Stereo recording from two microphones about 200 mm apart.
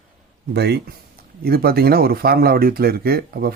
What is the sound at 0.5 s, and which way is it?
Speech, 55° right (ahead or behind).